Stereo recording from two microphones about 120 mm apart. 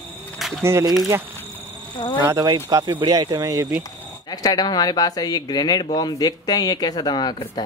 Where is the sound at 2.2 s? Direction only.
30° right (ahead or behind).